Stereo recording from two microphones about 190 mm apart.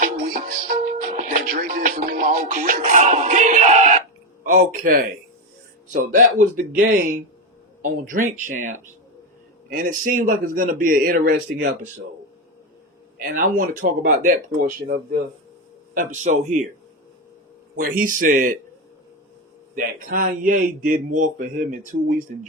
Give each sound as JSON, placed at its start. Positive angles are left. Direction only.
{"t": 0.0, "sound": "music", "side_deg": -50}
{"t": 4.4, "sound": "a man's voice", "side_deg": -45}
{"t": 13.1, "sound": "a man's voice", "side_deg": -45}
{"t": 17.7, "sound": "a man's voice", "side_deg": -50}
{"t": 19.7, "sound": "a man's voice", "side_deg": -50}